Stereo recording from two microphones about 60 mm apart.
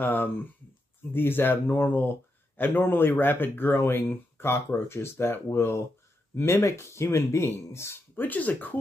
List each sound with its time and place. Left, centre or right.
0.0 s speech: left
8.2 s speech: left